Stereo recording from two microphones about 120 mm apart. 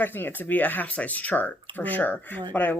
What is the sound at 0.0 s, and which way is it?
Speech, 15° left (ahead or behind).